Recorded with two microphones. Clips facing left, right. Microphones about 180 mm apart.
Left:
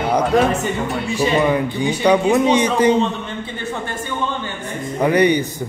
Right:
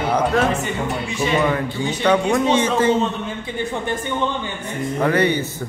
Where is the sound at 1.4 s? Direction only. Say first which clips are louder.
Left 3 dB; 15° left (ahead or behind).